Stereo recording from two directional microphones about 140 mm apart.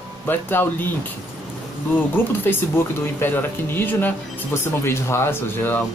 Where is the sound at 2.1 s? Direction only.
15° left (ahead or behind).